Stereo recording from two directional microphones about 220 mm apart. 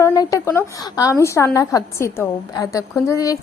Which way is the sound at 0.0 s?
15° left (ahead or behind).